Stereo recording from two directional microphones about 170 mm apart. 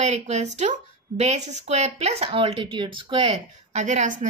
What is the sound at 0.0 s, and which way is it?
A woman's voice, 40° right (ahead or behind).